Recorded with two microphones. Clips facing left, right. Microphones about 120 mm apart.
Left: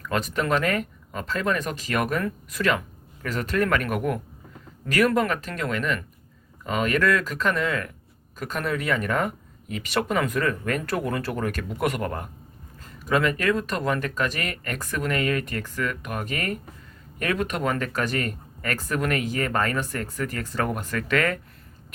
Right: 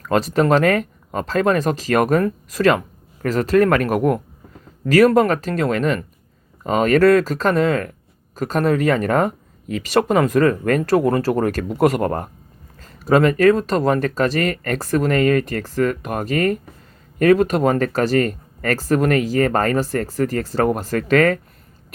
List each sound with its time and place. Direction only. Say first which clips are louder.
0.0 s speech: right 9 dB; 35° right (ahead or behind)